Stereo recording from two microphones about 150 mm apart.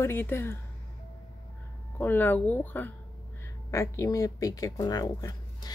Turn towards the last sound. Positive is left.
turn(degrees=25)  # may be behind; listen again after turning